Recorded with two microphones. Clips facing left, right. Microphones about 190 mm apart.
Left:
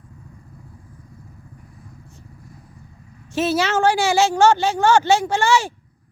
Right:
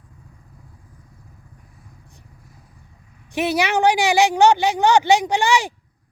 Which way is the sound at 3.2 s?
15° right (ahead or behind).